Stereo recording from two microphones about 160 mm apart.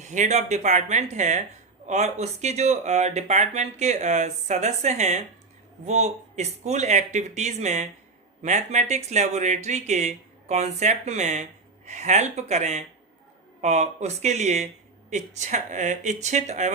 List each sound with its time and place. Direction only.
0.0 s speech: 50° right (ahead or behind)